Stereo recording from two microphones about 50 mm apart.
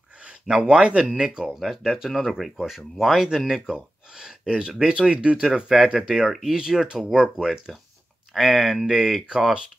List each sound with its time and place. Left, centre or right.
0.6 s speech: right
1.5 s speech: centre
5.4 s speech: centre
8.3 s speech: centre